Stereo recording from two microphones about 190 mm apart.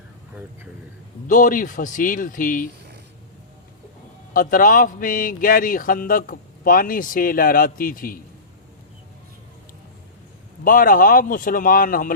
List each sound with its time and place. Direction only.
1.3 s speech: 45° left (ahead or behind)
4.4 s speech: 45° left (ahead or behind)
10.6 s speech: 45° left (ahead or behind)